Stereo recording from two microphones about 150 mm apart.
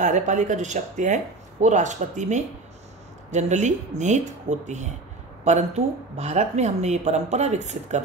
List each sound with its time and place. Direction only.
0.0 s speech: 55° right (ahead or behind)
6.1 s speech: 50° right (ahead or behind)